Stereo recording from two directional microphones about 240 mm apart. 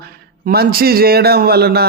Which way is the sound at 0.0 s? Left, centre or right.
Right.